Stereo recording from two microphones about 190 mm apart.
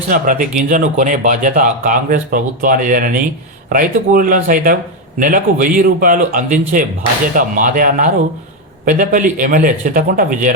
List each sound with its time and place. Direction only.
0.1 s speech: 45° right (ahead or behind)